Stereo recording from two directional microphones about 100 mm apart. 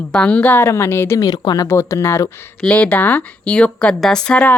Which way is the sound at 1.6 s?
25° left (ahead or behind).